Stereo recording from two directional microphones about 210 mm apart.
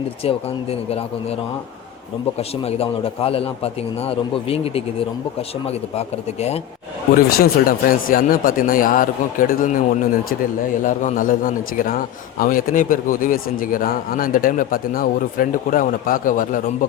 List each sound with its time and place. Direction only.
0.2 s a man's voice: 30° left (ahead or behind)
2.4 s a man's voice: 30° left (ahead or behind)
7.2 s speech: 45° left (ahead or behind)